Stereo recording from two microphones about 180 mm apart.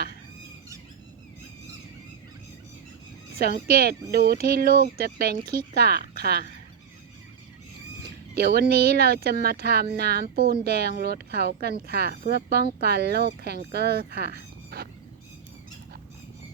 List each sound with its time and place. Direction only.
3.3 s speech: 55° right (ahead or behind)
8.4 s speech: 60° right (ahead or behind)